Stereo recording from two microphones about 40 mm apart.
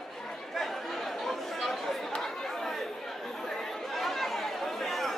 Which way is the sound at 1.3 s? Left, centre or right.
Centre.